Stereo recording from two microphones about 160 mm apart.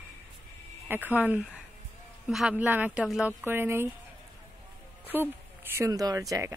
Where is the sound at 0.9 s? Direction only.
10° right (ahead or behind).